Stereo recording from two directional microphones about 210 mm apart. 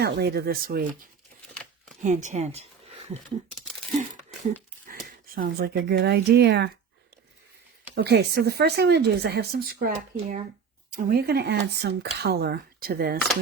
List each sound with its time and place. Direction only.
0.0 s speech: 50° right (ahead or behind)
2.0 s speech: 35° right (ahead or behind)
3.9 s crumpling: 35° right (ahead or behind)
4.9 s speech: 40° right (ahead or behind)
7.9 s speech: 50° right (ahead or behind)